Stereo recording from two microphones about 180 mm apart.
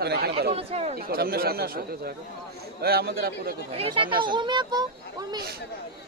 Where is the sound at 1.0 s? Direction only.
55° right (ahead or behind).